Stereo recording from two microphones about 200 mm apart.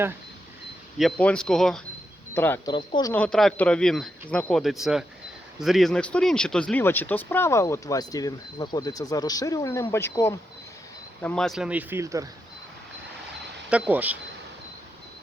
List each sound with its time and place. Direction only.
0.9 s speech: centre (ahead or behind)
2.7 s speech: 25° left (ahead or behind)
3.1 s speech: 5° left (ahead or behind); by 12.3 s 15° right (ahead or behind)
13.7 s speech: 5° right (ahead or behind)